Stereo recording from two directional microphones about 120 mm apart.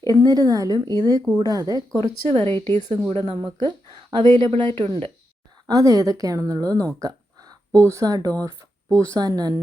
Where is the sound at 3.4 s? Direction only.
30° right (ahead or behind).